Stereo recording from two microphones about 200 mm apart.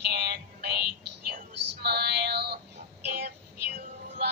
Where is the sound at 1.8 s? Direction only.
55° right (ahead or behind).